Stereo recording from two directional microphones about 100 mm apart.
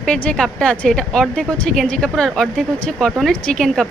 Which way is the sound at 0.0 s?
10° left (ahead or behind).